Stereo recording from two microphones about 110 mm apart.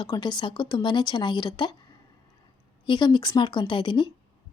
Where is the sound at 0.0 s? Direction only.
45° left (ahead or behind).